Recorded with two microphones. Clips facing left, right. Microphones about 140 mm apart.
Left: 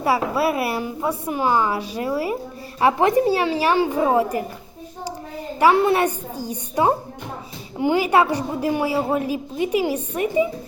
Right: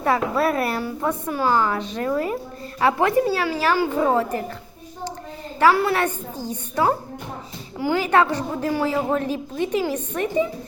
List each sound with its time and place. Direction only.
0.0 s a woman's voice: 5° left (ahead or behind)
5.5 s a woman's voice: 15° left (ahead or behind)